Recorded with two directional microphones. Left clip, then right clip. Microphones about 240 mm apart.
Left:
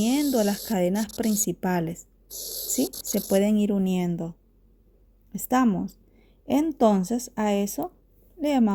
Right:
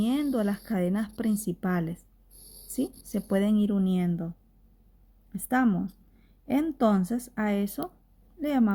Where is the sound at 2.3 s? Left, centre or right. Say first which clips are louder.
Left 17 dB; left.